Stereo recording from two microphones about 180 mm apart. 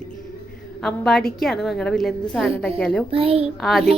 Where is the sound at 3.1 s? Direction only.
30° right (ahead or behind).